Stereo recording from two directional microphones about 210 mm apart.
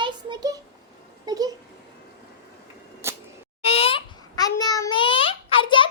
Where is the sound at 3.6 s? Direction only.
30° left (ahead or behind).